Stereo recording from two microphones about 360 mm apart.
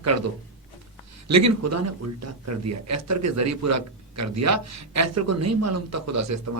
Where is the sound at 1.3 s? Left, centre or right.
Right.